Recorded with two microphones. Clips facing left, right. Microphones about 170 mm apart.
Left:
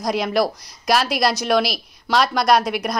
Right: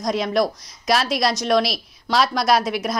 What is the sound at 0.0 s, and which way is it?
A woman's voice, centre (ahead or behind).